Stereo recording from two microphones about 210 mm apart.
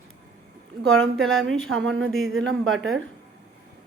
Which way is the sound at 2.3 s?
60° right (ahead or behind).